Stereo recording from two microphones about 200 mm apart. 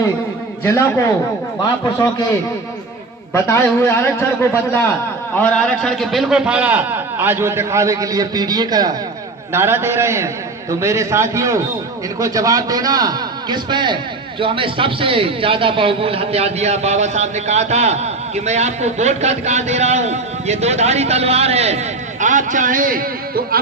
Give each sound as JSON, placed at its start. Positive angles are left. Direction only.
{"t": 0.6, "sound": "a man's voice", "side_deg": 10}
{"t": 3.3, "sound": "a man's voice", "side_deg": 10}